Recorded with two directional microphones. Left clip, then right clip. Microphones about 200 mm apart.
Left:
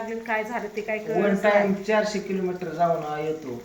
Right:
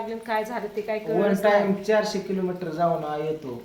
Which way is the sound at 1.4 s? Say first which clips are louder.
Even; 20° right (ahead or behind).